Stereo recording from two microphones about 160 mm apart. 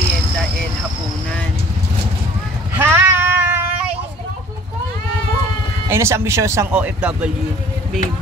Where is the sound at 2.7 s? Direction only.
15° right (ahead or behind).